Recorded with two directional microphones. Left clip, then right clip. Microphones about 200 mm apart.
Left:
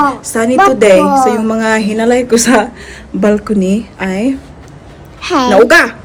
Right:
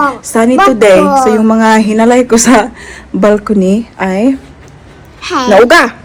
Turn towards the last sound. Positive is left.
turn(degrees=-15)  # may be behind; listen again after turning